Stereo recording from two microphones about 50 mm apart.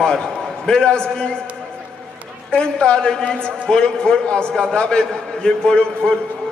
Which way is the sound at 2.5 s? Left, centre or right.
Centre.